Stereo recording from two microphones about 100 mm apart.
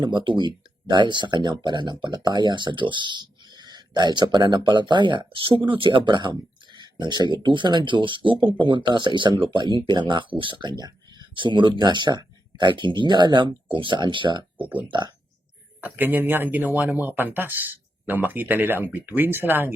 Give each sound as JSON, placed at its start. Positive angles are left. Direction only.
{"t": 0.0, "sound": "speech", "side_deg": -50}
{"t": 14.6, "sound": "speech", "side_deg": -15}
{"t": 14.8, "sound": "speech", "side_deg": -50}
{"t": 15.8, "sound": "speech", "side_deg": -20}